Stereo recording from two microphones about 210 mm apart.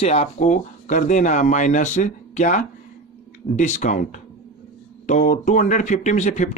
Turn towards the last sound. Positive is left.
turn(degrees=35)  # may be behind; listen again after turning